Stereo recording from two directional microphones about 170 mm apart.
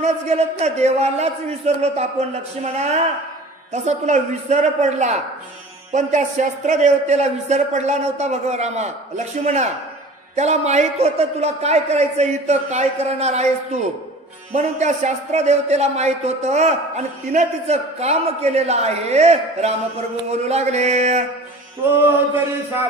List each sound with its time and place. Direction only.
0.0 s a man's voice: 40° right (ahead or behind)